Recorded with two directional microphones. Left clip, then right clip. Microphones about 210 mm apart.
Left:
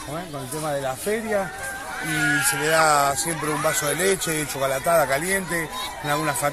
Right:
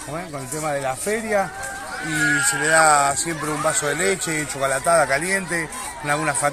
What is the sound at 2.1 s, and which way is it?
Speech, 50° right (ahead or behind).